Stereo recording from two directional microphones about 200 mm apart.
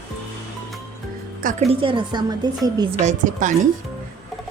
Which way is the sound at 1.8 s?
25° right (ahead or behind).